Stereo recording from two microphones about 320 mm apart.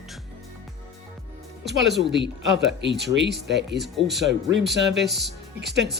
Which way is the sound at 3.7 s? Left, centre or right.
Centre.